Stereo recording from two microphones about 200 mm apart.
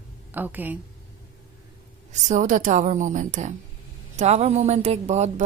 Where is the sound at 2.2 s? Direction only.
40° right (ahead or behind).